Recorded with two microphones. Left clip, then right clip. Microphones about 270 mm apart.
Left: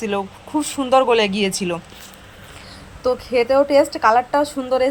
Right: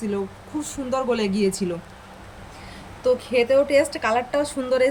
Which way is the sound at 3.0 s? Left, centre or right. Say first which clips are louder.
Left 2 dB; centre.